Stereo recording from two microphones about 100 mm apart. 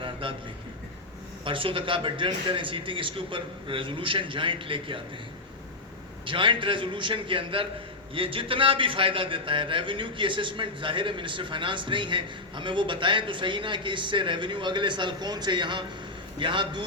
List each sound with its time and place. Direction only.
0.0 s a sound: 60° right (ahead or behind)
1.5 s a man's voice: 60° right (ahead or behind)
6.2 s a man's voice: 60° right (ahead or behind)